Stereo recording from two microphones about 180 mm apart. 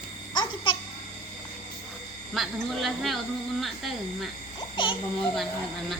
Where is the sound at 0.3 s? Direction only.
30° left (ahead or behind).